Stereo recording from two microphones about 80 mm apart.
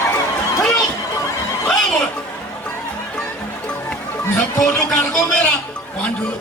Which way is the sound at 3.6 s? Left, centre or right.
Centre.